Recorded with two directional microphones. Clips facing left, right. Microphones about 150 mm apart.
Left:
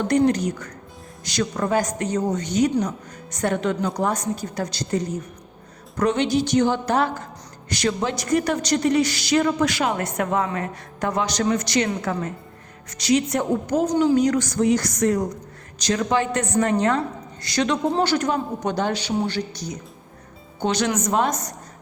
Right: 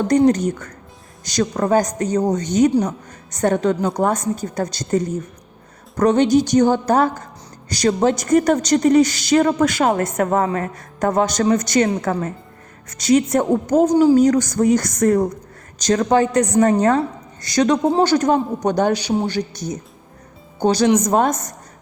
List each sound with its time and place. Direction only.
0.3 s a woman's voice: 45° right (ahead or behind)